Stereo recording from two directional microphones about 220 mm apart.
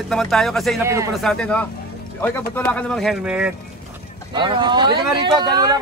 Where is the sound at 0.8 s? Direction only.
10° right (ahead or behind).